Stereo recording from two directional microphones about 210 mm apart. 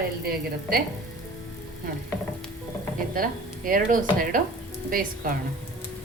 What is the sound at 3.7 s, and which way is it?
A woman's voice, 40° right (ahead or behind).